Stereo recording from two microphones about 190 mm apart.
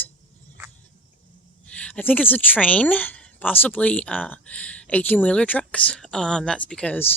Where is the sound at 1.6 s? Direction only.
5° left (ahead or behind).